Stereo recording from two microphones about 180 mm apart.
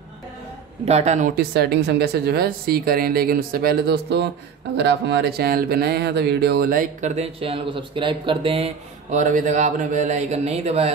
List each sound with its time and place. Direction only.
0.8 s speech: 40° right (ahead or behind)
1.3 s speech: 60° right (ahead or behind); by 8.6 s 30° right (ahead or behind)
9.1 s a man's voice: 45° right (ahead or behind)